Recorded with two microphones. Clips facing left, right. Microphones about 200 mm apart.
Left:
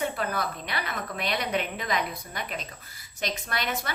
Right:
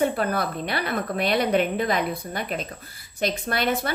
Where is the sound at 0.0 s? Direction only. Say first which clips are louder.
Right 6 dB; 50° right (ahead or behind).